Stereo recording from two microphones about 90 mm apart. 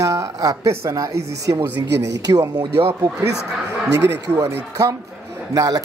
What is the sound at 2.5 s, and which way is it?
Speech, 50° right (ahead or behind).